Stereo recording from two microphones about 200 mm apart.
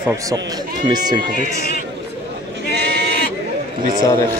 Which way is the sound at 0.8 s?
20° right (ahead or behind).